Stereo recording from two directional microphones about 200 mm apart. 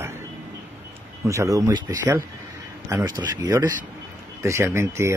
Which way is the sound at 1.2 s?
15° right (ahead or behind).